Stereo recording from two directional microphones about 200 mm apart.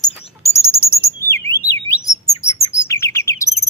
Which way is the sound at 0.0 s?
15° left (ahead or behind).